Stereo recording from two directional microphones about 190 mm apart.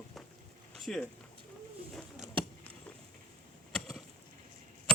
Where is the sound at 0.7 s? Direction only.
Centre (ahead or behind).